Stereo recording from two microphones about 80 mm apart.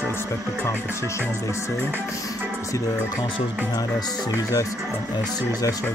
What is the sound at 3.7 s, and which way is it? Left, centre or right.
Speech, left.